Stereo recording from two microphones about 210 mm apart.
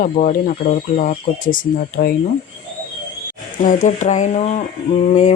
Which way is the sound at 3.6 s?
35° left (ahead or behind).